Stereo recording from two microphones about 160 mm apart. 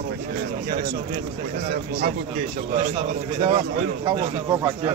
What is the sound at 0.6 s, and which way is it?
Speech, 70° right (ahead or behind).